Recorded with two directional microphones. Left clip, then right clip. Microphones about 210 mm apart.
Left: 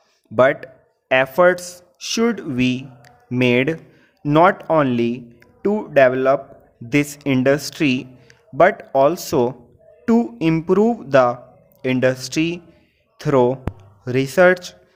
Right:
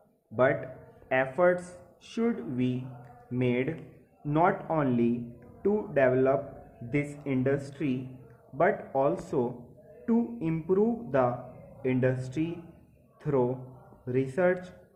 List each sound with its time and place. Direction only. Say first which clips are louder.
0.3 s speech: left 10 dB; 55° left (ahead or behind)
13.2 s speech: left 12 dB; 75° left (ahead or behind)
14.0 s speech: left 13 dB; 55° left (ahead or behind)